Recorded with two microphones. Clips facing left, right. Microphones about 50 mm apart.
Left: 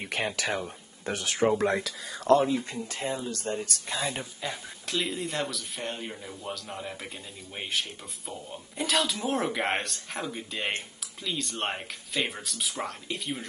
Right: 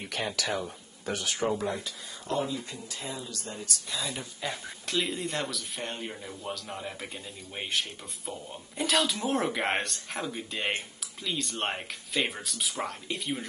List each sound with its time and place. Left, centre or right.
0.0 s speech: left
1.6 s speech: left
2.4 s speech: left
4.4 s speech: centre
8.3 s speech: centre